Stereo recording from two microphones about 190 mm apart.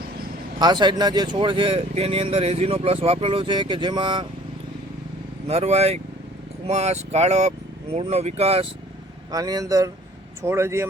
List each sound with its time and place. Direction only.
0.6 s speech: 20° right (ahead or behind)
5.5 s speech: 35° right (ahead or behind)
9.3 s speech: 20° right (ahead or behind)